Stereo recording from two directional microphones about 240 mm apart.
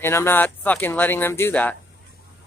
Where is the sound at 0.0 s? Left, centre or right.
Centre.